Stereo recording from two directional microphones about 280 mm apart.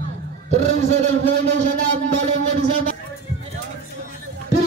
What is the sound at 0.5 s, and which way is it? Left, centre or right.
A man's voice, right.